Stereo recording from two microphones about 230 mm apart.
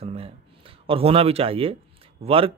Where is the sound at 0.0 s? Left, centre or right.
Right.